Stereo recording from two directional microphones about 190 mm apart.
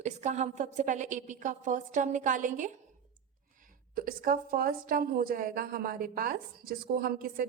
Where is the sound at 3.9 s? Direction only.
45° right (ahead or behind).